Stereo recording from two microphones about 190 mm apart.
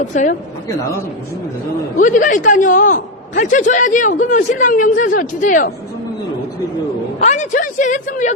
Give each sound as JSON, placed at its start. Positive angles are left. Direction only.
{"t": 0.0, "sound": "a woman's voice", "side_deg": 40}
{"t": 2.0, "sound": "a man's voice", "side_deg": 45}
{"t": 7.2, "sound": "a woman's voice", "side_deg": 40}